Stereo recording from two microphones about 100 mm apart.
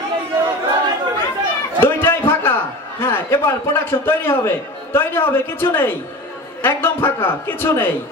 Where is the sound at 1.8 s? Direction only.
25° left (ahead or behind).